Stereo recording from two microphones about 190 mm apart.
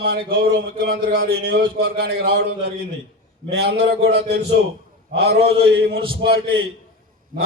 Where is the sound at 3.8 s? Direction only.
60° right (ahead or behind).